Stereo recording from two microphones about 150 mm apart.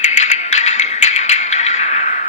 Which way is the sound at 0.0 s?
50° left (ahead or behind).